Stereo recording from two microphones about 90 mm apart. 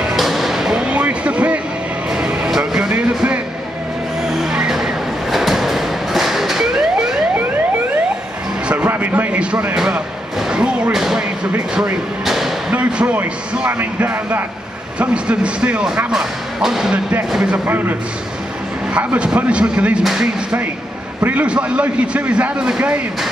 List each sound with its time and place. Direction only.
0.0 s music: centre (ahead or behind)
4.3 s vehicle: 5° right (ahead or behind)
8.6 s music: 15° right (ahead or behind)
9.8 s a sound: 10° right (ahead or behind)
10.5 s thump: 5° right (ahead or behind)
11.5 s speech: 15° right (ahead or behind)
12.3 s thump: 5° right (ahead or behind)
12.7 s speech: 15° right (ahead or behind)
17.6 s a man's voice: 20° right (ahead or behind)
18.9 s speech: 15° right (ahead or behind)